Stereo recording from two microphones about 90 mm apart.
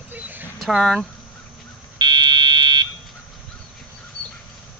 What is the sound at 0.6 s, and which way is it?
Speech, centre (ahead or behind).